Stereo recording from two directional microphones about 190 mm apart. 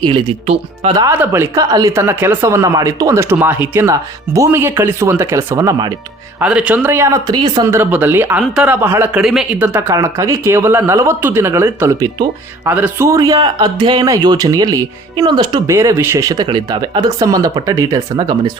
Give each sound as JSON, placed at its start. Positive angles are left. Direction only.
{"t": 0.0, "sound": "speech", "side_deg": -30}
{"t": 1.0, "sound": "speech", "side_deg": -15}
{"t": 6.4, "sound": "speech", "side_deg": -5}